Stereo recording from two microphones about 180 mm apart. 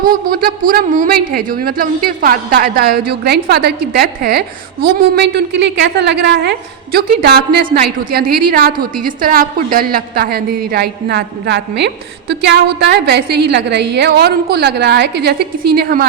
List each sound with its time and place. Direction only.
0.1 s a woman's voice: 50° right (ahead or behind)